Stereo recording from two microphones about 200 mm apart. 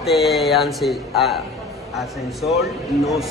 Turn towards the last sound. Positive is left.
turn(degrees=0)  # may be behind; listen again after turning